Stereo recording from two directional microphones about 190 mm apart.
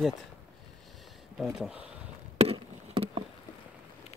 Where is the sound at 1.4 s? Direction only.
5° right (ahead or behind).